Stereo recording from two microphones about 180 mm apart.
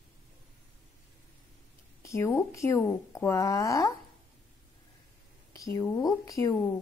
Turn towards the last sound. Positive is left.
turn(degrees=15)  # may be behind; listen again after turning